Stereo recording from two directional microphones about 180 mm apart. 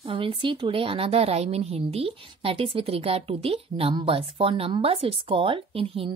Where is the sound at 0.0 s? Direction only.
30° right (ahead or behind).